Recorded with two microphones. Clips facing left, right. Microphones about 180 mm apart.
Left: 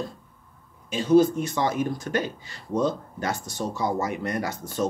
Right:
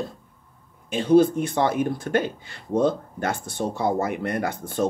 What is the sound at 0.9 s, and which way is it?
Speech, 55° right (ahead or behind).